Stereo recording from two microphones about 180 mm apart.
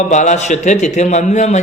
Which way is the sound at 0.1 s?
40° left (ahead or behind).